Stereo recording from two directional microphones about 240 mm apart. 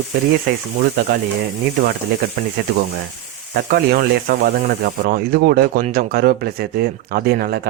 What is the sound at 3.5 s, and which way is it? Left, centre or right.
Speech, right.